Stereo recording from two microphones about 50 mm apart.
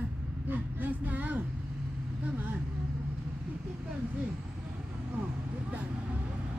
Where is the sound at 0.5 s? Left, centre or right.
Right.